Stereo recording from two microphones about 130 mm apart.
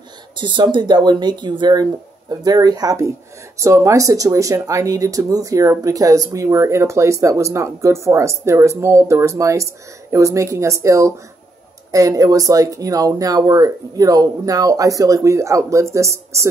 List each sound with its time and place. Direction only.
0.4 s speech: 40° right (ahead or behind); by 16.4 s 20° right (ahead or behind)